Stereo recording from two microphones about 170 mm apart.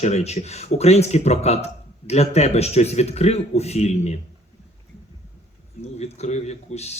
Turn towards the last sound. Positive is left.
turn(degrees=40)  # may be behind; listen again after turning